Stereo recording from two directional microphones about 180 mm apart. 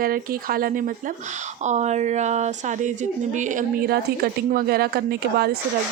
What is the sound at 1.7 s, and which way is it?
A woman's voice, 40° right (ahead or behind).